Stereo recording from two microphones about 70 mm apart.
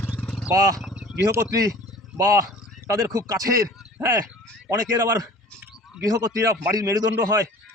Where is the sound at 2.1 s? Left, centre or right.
Right.